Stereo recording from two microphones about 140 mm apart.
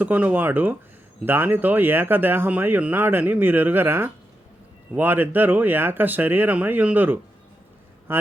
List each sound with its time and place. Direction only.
0.0 s speech: 10° right (ahead or behind)